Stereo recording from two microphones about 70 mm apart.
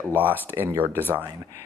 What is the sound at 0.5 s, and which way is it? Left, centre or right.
Speech, right.